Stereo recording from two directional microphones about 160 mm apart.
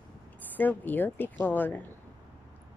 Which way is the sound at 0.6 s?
10° left (ahead or behind).